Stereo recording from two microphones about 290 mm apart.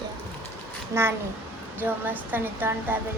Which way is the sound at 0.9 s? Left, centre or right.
Centre.